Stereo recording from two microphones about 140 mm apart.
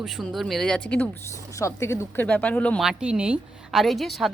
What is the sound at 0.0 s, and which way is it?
A woman's voice, centre (ahead or behind).